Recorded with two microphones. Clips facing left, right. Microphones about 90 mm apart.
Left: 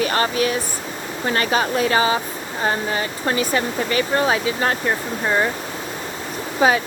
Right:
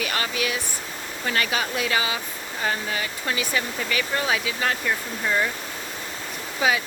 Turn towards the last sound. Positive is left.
turn(degrees=40)  # may be behind; listen again after turning